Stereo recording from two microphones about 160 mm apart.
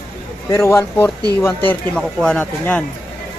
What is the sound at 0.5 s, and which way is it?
Speech, 15° left (ahead or behind).